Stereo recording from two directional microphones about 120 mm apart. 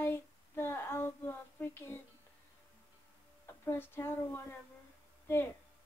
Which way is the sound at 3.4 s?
20° left (ahead or behind).